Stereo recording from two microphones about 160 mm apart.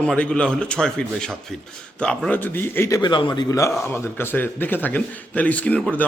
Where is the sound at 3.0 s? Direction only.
30° left (ahead or behind); by 5.9 s 5° left (ahead or behind).